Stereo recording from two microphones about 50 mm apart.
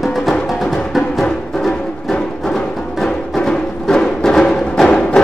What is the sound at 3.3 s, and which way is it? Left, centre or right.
Music, centre.